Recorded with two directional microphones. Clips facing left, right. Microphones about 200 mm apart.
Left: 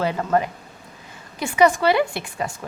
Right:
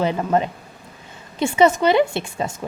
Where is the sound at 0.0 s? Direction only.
20° right (ahead or behind).